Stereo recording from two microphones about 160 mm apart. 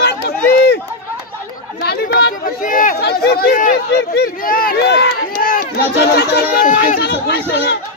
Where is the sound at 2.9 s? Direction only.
90° left; by 5.6 s 65° left (ahead or behind).